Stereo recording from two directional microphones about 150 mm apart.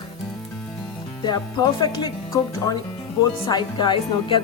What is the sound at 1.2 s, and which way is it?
A woman's voice, 30° left (ahead or behind).